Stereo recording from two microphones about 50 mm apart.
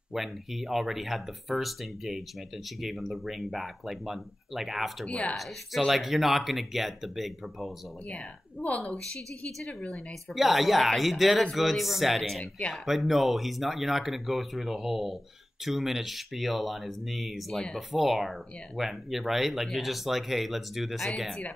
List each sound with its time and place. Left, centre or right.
0.1 s speech: centre
5.0 s a woman's voice: left
5.3 s speech: centre
8.5 s a woman's voice: left
9.6 s speech: centre
12.4 s a woman's voice: centre
12.8 s speech: centre